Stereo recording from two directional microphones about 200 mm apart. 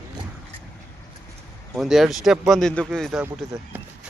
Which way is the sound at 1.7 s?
Centre (ahead or behind).